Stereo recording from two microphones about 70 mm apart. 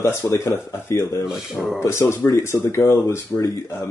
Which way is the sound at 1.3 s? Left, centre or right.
Centre.